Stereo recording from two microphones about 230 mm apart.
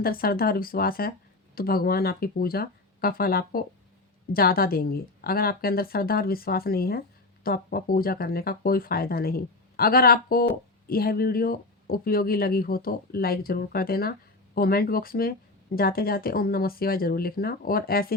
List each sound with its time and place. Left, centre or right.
0.0 s speech: left